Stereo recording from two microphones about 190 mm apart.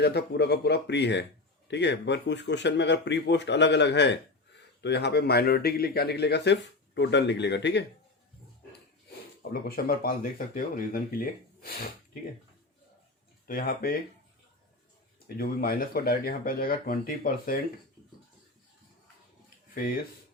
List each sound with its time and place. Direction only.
0.0 s speech: 60° left (ahead or behind)
9.4 s speech: 50° left (ahead or behind)
13.5 s speech: 50° left (ahead or behind)
15.4 s speech: 50° left (ahead or behind)
19.7 s speech: 50° left (ahead or behind)